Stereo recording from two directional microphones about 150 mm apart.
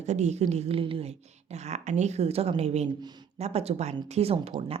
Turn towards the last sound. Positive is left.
turn(degrees=-40)  # may be behind; listen again after turning